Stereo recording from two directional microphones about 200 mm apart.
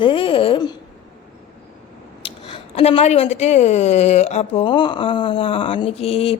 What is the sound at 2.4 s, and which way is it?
A woman's voice, 30° left (ahead or behind).